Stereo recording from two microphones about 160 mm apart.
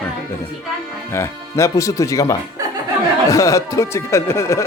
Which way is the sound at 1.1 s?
15° left (ahead or behind).